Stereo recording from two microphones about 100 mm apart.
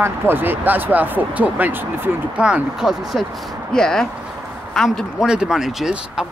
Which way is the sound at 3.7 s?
5° left (ahead or behind).